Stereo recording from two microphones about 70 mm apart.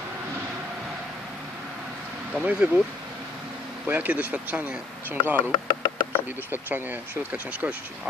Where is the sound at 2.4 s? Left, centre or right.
Right.